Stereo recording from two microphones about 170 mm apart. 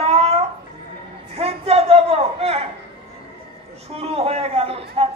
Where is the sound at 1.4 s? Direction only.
35° right (ahead or behind).